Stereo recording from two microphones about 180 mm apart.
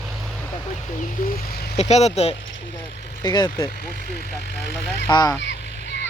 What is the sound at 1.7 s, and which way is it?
Speech, 40° left (ahead or behind).